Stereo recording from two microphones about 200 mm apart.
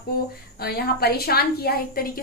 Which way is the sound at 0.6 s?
50° left (ahead or behind).